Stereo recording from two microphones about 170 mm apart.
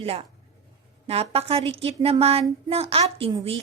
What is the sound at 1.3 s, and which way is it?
A woman's voice, 35° right (ahead or behind).